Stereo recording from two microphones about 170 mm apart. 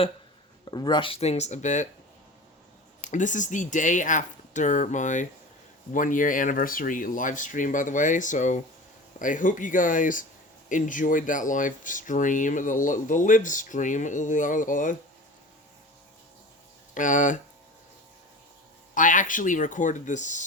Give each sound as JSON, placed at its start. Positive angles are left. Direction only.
{"t": 0.6, "sound": "speech", "side_deg": 25}
{"t": 3.0, "sound": "speech", "side_deg": 45}
{"t": 16.9, "sound": "speech", "side_deg": 50}
{"t": 18.9, "sound": "speech", "side_deg": 50}